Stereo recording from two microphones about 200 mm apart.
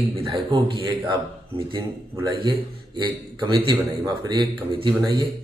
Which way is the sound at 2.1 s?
20° right (ahead or behind).